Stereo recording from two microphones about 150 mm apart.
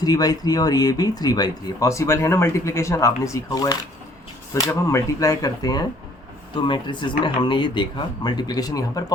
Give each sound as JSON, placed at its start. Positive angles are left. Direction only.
{"t": 0.0, "sound": "speech", "side_deg": 25}